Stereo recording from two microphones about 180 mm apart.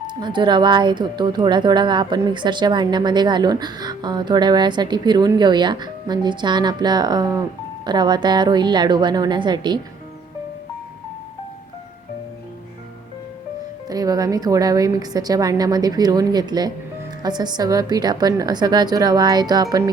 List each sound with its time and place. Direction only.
0.1 s speech: 25° right (ahead or behind)
13.8 s speech: 20° right (ahead or behind)